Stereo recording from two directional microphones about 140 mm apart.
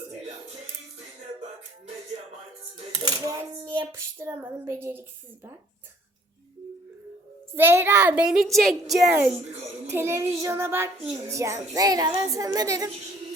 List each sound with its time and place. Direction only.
2.9 s a sound: 25° right (ahead or behind)
7.5 s a child's voice: 15° right (ahead or behind); by 9.1 s centre (ahead or behind)
9.8 s child singing: 20° right (ahead or behind)